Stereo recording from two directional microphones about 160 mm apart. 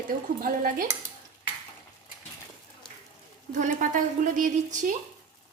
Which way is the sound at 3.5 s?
55° right (ahead or behind).